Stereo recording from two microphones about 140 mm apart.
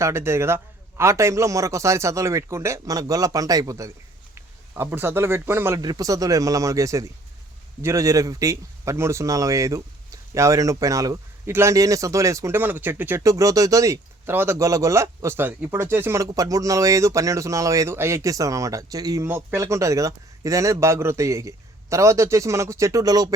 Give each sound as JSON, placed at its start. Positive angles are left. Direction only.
{"t": 0.0, "sound": "speech", "side_deg": -20}